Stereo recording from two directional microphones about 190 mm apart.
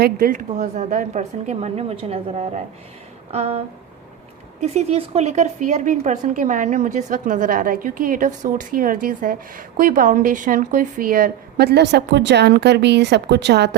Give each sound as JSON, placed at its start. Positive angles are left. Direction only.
{"t": 0.0, "sound": "a woman's voice", "side_deg": -50}
{"t": 4.6, "sound": "a woman's voice", "side_deg": -35}